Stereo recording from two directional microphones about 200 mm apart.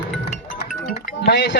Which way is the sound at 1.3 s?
55° left (ahead or behind).